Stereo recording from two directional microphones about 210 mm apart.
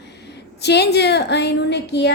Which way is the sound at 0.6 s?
50° left (ahead or behind).